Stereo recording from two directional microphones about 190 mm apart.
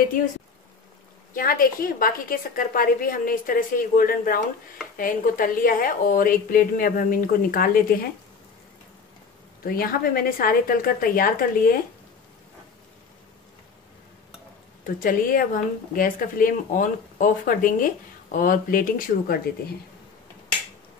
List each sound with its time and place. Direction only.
1.3 s speech: 50° left (ahead or behind)
9.7 s speech: 50° left (ahead or behind)
15.0 s speech: 50° left (ahead or behind)